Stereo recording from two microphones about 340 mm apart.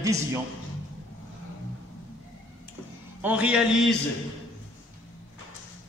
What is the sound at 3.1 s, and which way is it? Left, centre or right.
Speech, centre.